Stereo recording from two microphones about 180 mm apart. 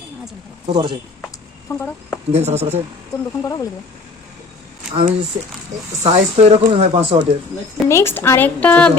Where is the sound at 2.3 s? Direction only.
35° right (ahead or behind).